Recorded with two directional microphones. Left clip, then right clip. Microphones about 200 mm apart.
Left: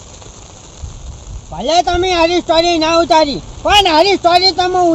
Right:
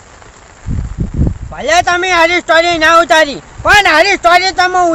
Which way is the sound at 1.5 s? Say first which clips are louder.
Right 2 dB; 30° right (ahead or behind).